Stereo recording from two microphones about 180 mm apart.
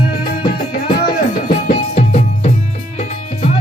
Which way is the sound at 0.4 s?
50° left (ahead or behind).